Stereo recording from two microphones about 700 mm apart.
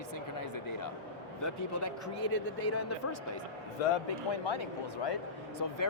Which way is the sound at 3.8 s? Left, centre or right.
Left.